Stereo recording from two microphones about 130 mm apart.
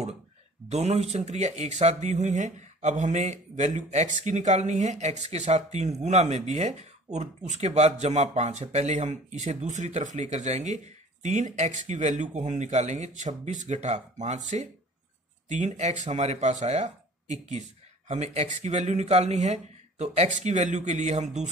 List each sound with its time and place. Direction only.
0.7 s speech: 55° right (ahead or behind)